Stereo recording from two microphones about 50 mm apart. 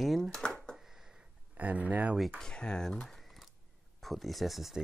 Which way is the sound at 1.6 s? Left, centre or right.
Right.